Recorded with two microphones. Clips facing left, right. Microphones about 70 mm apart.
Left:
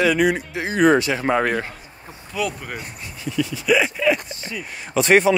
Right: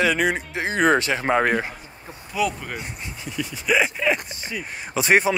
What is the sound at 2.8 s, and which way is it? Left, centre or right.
Speech, centre.